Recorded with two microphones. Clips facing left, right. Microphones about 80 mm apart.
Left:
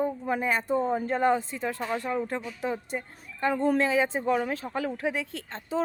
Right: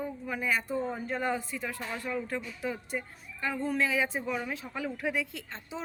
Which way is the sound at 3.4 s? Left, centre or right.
Left.